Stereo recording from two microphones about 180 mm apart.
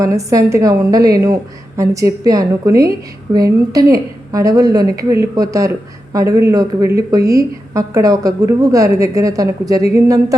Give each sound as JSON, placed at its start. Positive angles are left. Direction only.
{"t": 0.0, "sound": "a woman's voice", "side_deg": -20}